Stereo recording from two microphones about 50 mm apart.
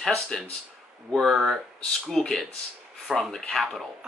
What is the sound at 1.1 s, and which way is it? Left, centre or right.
Speech, centre.